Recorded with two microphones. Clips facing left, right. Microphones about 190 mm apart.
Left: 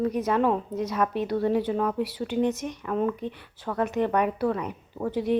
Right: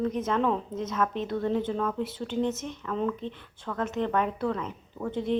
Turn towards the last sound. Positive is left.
turn(degrees=10)  # may be behind; listen again after turning